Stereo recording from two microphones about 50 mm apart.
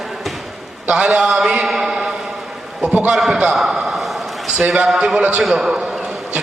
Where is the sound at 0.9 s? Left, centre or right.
Right.